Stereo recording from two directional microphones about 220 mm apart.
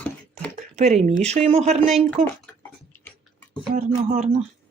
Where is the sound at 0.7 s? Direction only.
30° right (ahead or behind).